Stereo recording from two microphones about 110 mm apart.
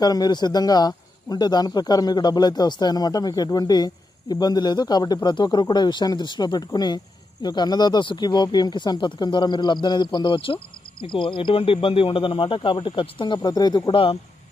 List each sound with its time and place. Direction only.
0.0 s speech: 40° left (ahead or behind)
13.9 s speech: 55° left (ahead or behind)